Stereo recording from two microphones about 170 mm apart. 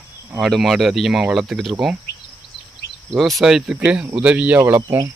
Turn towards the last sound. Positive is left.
turn(degrees=-20)  # may be behind; listen again after turning